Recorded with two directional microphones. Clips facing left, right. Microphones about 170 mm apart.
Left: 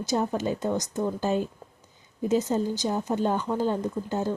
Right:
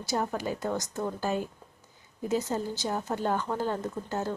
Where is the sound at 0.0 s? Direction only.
20° left (ahead or behind).